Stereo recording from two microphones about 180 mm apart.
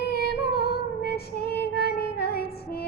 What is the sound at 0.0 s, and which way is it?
Child singing, 65° left (ahead or behind).